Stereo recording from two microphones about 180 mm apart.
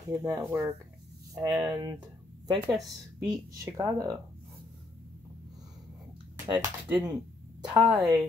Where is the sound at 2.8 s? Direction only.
25° right (ahead or behind).